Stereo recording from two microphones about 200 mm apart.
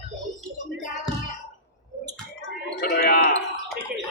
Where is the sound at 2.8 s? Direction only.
50° left (ahead or behind).